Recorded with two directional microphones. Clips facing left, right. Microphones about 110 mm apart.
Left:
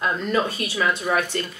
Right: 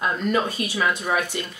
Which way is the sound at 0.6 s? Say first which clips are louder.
Left 1 dB; 15° right (ahead or behind).